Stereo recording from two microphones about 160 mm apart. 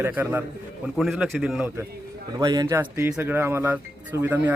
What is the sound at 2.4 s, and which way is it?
A man's voice, 25° right (ahead or behind).